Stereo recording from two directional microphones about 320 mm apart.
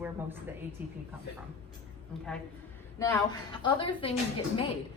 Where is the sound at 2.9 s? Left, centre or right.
Centre.